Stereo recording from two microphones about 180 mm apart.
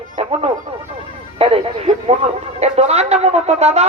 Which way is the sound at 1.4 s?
30° right (ahead or behind).